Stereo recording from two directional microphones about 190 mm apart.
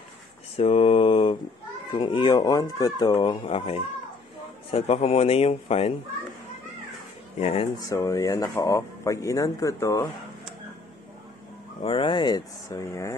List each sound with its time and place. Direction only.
0.6 s mantra: 30° left (ahead or behind)
1.9 s a man's voice: 25° left (ahead or behind)
7.3 s a man's voice: 35° left (ahead or behind)
7.9 s speech: 20° left (ahead or behind)
11.8 s speech: 25° left (ahead or behind)